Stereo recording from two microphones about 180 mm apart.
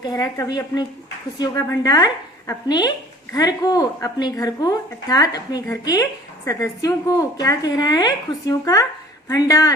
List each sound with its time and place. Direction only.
0.0 s a woman's voice: 20° left (ahead or behind)